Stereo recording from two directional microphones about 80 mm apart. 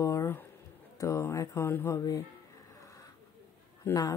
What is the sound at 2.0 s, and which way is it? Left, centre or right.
Speech, left.